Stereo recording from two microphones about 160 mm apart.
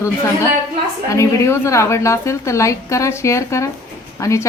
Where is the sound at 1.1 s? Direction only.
15° left (ahead or behind).